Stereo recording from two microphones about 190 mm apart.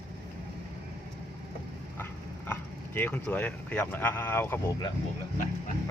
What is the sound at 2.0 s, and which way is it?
Speech, 10° left (ahead or behind).